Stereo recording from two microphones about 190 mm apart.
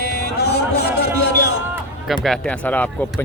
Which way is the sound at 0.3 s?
60° left (ahead or behind).